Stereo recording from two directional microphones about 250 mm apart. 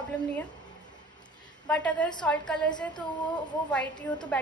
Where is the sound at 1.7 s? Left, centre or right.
Centre.